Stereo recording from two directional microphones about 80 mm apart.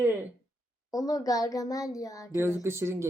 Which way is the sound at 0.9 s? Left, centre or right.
Left.